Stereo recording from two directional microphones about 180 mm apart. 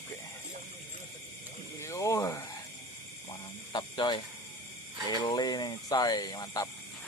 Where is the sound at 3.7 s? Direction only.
25° left (ahead or behind).